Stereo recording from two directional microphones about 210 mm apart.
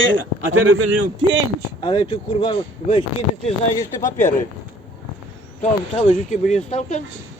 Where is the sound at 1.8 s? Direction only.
25° left (ahead or behind).